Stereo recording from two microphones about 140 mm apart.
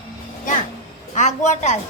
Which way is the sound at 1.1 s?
55° left (ahead or behind).